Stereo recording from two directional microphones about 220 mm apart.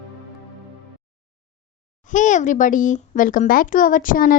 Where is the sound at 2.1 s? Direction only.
35° left (ahead or behind).